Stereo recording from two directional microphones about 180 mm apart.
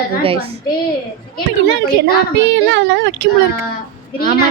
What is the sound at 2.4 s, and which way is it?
Speech, 90° right.